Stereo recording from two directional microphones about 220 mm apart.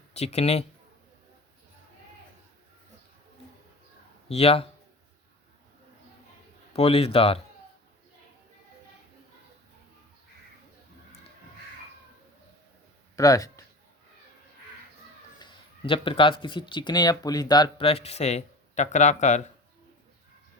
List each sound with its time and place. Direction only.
0.1 s speech: 30° left (ahead or behind)
4.3 s speech: 25° left (ahead or behind)
6.7 s speech: 25° left (ahead or behind)
13.1 s speech: 15° left (ahead or behind)
15.4 s speech: 20° left (ahead or behind)